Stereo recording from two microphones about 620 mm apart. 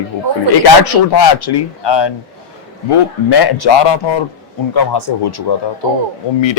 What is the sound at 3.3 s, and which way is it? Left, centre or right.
Speech, left.